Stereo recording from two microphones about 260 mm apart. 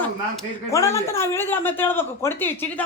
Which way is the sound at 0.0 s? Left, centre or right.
Centre.